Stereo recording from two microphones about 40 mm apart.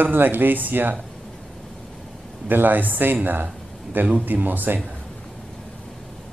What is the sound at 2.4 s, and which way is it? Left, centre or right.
Speech, right.